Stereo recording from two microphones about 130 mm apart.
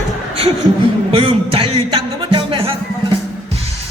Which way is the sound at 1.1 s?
45° right (ahead or behind).